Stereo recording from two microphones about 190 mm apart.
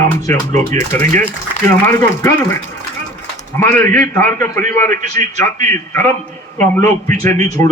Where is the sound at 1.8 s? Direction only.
15° left (ahead or behind).